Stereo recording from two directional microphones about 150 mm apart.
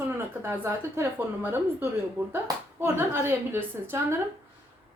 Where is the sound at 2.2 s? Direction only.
10° right (ahead or behind).